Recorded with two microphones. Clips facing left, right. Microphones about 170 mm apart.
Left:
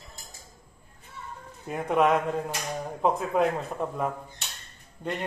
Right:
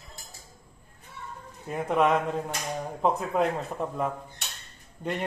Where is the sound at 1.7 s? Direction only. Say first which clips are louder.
Left 1 dB; centre (ahead or behind).